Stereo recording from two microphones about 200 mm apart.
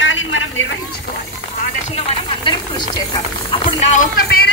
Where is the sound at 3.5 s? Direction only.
25° left (ahead or behind).